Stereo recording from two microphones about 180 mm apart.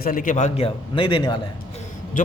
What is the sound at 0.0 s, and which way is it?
Speech, 50° left (ahead or behind).